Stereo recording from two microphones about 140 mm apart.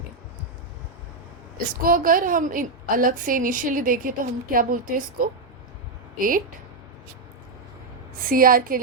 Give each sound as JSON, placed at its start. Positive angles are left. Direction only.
{"t": 1.5, "sound": "a woman's voice", "side_deg": -90}
{"t": 8.3, "sound": "a woman's voice", "side_deg": -90}